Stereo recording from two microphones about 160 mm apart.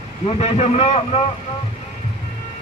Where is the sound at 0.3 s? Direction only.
40° left (ahead or behind).